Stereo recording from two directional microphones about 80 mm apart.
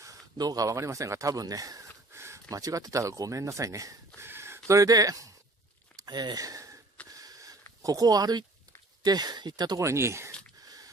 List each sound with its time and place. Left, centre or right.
0.4 s speech: right
2.1 s speech: right
4.2 s a sound: right
4.7 s speech: right
5.9 s sniff: right
7.1 s a sound: right
7.8 s speech: right
9.8 s speech: right